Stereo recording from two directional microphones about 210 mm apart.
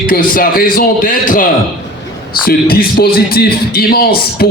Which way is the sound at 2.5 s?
45° left (ahead or behind).